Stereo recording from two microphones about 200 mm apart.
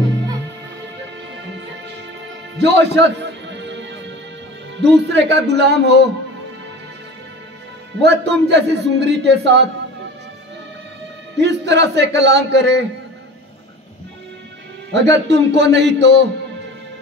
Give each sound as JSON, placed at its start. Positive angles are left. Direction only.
{"t": 2.5, "sound": "music", "side_deg": -60}
{"t": 4.7, "sound": "speech", "side_deg": -60}
{"t": 8.0, "sound": "speech", "side_deg": -60}
{"t": 11.3, "sound": "speech", "side_deg": -60}
{"t": 15.0, "sound": "speech", "side_deg": -60}